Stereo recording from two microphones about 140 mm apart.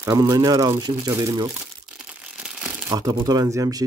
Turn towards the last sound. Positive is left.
turn(degrees=-25)  # may be behind; listen again after turning